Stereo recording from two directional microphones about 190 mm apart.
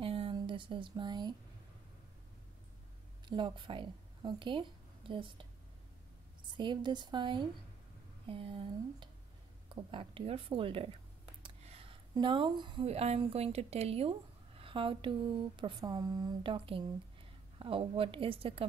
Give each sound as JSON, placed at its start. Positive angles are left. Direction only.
{"t": 0.0, "sound": "a sound", "side_deg": -30}
{"t": 3.3, "sound": "speech", "side_deg": -25}
{"t": 6.5, "sound": "a woman's voice", "side_deg": -25}